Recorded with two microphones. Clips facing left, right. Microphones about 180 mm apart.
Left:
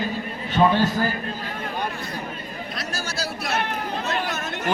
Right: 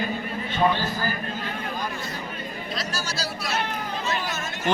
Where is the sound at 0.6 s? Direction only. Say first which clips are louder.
Left 3 dB; 55° left (ahead or behind).